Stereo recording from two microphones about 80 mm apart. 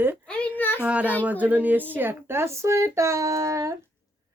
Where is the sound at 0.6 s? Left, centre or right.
Left.